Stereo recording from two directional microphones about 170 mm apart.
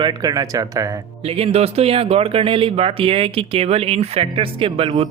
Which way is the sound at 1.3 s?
35° right (ahead or behind).